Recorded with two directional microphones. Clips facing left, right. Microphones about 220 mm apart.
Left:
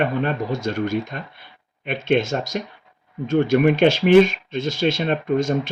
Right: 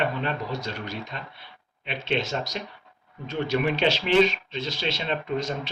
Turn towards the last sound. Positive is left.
turn(degrees=50)  # may be behind; listen again after turning